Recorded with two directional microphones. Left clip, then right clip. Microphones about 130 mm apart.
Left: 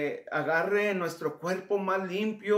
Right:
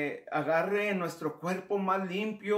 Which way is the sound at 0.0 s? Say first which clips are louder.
Left 2 dB; 25° left (ahead or behind).